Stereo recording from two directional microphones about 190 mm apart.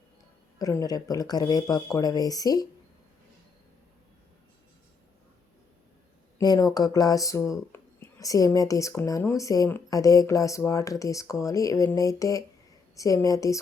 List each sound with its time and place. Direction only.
0.6 s speech: 20° left (ahead or behind)
6.4 s speech: 20° left (ahead or behind)